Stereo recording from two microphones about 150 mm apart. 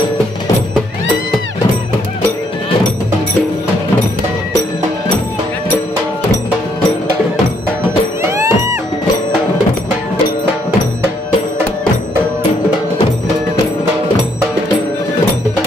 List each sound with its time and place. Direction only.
8.2 s music: 20° right (ahead or behind)